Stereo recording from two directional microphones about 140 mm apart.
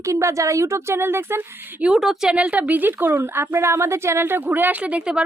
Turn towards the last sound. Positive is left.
turn(degrees=-10)  # may be behind; listen again after turning